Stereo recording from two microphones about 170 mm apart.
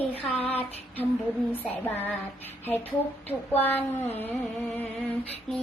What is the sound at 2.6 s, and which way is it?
Speech, 10° left (ahead or behind).